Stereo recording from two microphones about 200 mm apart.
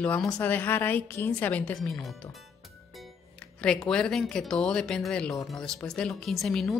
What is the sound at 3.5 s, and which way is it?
A woman's voice, 5° left (ahead or behind).